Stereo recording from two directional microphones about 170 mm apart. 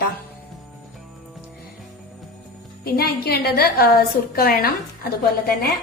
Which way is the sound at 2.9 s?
65° left (ahead or behind).